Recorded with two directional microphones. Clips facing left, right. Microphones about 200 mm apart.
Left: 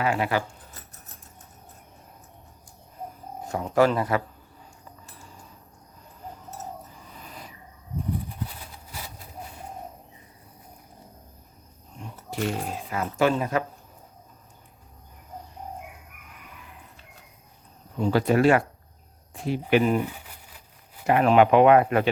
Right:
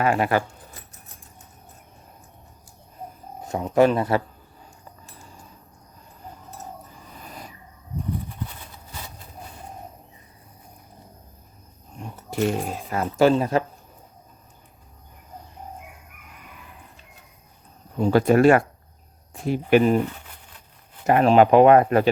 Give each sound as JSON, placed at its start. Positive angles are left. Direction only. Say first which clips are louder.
{"t": 0.0, "sound": "speech", "louder": "right 4 dB", "side_deg": -50}
{"t": 3.5, "sound": "speech", "louder": "right 3 dB", "side_deg": -20}
{"t": 12.3, "sound": "speech", "louder": "right 5 dB", "side_deg": -45}
{"t": 18.0, "sound": "speech", "louder": "right 4 dB", "side_deg": -50}
{"t": 20.1, "sound": "crumpling", "louder": "right 2 dB", "side_deg": 10}
{"t": 21.1, "sound": "speech", "louder": "right 3 dB", "side_deg": -40}